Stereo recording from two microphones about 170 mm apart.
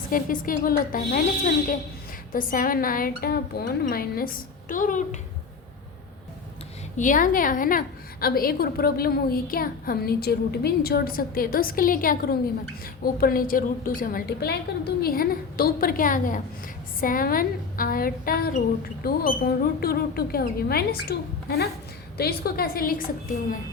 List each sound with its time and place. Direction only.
0.1 s a woman's voice: 55° left (ahead or behind)
6.9 s a woman's voice: 50° left (ahead or behind); by 21.2 s 65° left (ahead or behind)
22.2 s a woman's voice: 65° left (ahead or behind)